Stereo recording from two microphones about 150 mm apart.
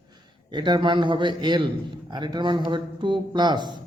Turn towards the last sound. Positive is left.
turn(degrees=-30)  # may be behind; listen again after turning